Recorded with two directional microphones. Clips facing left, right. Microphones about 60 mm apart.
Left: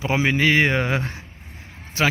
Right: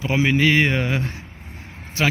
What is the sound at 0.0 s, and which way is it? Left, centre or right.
Speech, centre.